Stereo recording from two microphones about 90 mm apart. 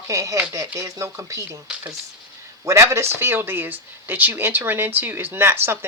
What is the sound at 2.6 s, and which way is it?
Speech, 30° right (ahead or behind).